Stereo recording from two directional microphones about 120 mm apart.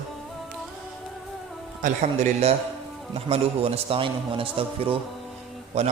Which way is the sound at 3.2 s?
55° right (ahead or behind).